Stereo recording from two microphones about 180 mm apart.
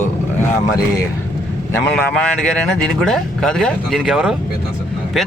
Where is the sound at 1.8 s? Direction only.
5° left (ahead or behind).